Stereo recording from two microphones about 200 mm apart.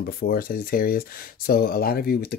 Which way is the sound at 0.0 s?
50° left (ahead or behind).